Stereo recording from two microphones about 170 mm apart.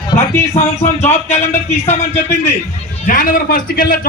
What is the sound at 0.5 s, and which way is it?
Speech, 40° left (ahead or behind).